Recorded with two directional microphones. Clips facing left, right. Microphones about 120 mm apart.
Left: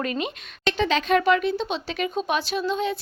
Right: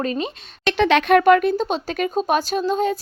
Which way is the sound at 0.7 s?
65° right (ahead or behind).